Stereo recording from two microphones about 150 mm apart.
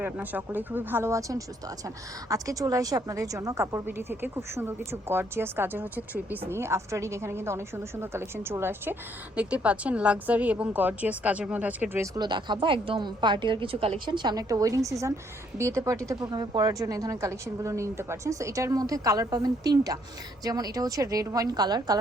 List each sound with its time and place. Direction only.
0.0 s a woman's voice: 10° right (ahead or behind)
12.1 s a woman's voice: 30° right (ahead or behind)